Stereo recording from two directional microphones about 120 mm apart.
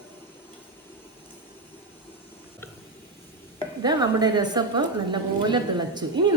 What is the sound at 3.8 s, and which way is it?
A woman's voice, 35° right (ahead or behind).